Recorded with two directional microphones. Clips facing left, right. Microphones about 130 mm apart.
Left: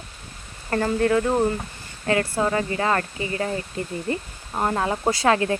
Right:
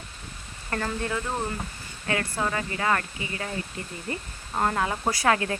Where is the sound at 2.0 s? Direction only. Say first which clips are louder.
Left 6 dB; 30° left (ahead or behind).